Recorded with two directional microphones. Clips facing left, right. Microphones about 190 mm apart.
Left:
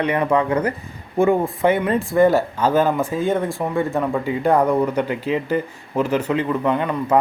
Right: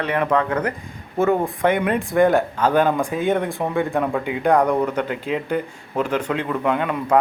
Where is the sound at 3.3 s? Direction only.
Centre (ahead or behind).